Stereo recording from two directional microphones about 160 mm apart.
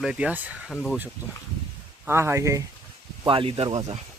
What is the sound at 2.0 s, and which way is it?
Speech, 15° right (ahead or behind).